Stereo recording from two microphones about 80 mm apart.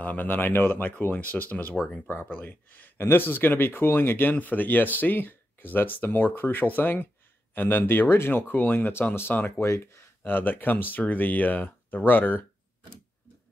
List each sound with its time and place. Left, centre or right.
0.0 s speech: left